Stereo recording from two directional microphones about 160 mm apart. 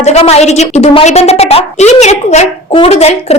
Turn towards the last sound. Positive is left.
turn(degrees=40)  # may be behind; listen again after turning